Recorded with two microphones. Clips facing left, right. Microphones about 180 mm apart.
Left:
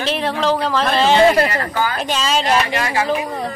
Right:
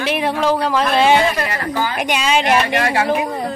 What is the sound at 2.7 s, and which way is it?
Speech, 60° right (ahead or behind).